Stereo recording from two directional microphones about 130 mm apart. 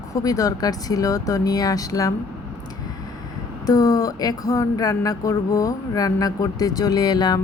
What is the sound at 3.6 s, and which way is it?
Speech, 30° left (ahead or behind).